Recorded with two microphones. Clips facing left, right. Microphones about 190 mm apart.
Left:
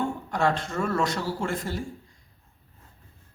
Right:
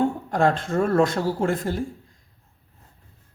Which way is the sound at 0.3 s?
50° right (ahead or behind).